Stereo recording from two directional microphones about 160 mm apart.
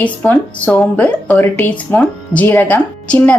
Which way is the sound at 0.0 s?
10° left (ahead or behind).